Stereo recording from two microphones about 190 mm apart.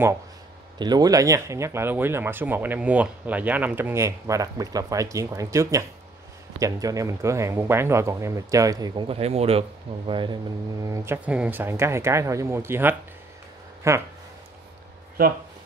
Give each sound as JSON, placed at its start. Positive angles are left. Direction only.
{"t": 0.7, "sound": "speech", "side_deg": -20}